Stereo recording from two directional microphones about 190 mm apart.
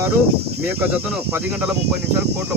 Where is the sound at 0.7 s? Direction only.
10° right (ahead or behind).